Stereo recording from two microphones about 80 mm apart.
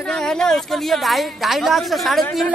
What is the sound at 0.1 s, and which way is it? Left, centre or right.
A woman's voice, centre.